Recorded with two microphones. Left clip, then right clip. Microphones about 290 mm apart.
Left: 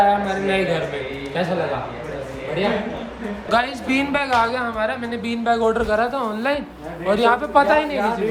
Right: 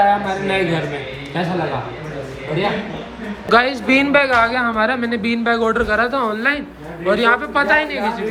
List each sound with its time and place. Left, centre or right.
0.0 s a woman's voice: centre
3.5 s a woman's voice: centre